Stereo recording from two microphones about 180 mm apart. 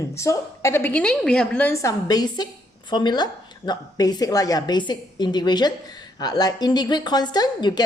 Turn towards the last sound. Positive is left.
turn(degrees=25)  # may be behind; listen again after turning